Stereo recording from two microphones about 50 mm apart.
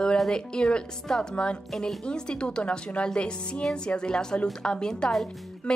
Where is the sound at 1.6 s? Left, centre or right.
Centre.